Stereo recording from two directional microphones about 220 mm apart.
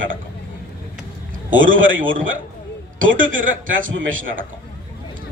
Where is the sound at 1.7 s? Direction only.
60° right (ahead or behind).